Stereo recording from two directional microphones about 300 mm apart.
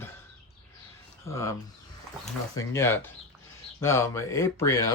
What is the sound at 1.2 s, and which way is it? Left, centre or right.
Speech, centre.